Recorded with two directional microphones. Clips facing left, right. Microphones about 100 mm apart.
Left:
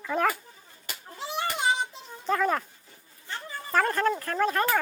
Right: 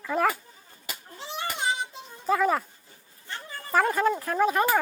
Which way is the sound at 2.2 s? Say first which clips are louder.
Right 2 dB; 5° right (ahead or behind).